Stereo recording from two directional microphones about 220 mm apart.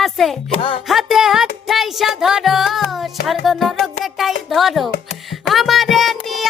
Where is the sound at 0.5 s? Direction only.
25° left (ahead or behind).